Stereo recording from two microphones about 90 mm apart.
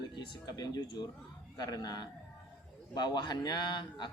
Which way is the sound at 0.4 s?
45° left (ahead or behind).